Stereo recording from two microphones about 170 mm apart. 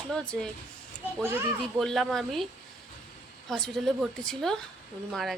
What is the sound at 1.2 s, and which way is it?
Speech, 15° right (ahead or behind).